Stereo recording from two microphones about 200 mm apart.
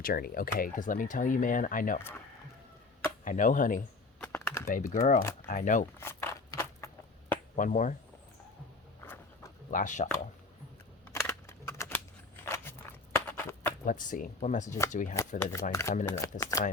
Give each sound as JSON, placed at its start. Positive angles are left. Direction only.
{"t": 0.0, "sound": "speech", "side_deg": 45}
{"t": 3.2, "sound": "speech", "side_deg": 40}
{"t": 4.2, "sound": "typing", "side_deg": 10}
{"t": 4.7, "sound": "speech", "side_deg": 40}
{"t": 6.0, "sound": "speech", "side_deg": 10}
{"t": 6.6, "sound": "a sound", "side_deg": 15}
{"t": 7.5, "sound": "speech", "side_deg": 40}
{"t": 9.7, "sound": "speech", "side_deg": 40}
{"t": 11.0, "sound": "a sound", "side_deg": 15}
{"t": 13.1, "sound": "walk", "side_deg": 10}
{"t": 13.8, "sound": "speech", "side_deg": 40}
{"t": 15.7, "sound": "speech", "side_deg": 15}